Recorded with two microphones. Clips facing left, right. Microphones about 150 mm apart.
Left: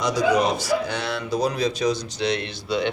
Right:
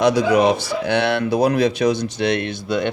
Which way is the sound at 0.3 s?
55° right (ahead or behind).